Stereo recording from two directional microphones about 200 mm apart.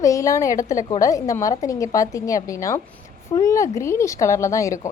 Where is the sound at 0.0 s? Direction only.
15° left (ahead or behind).